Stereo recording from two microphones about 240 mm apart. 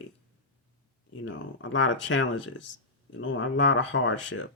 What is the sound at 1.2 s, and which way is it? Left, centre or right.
Speech, left.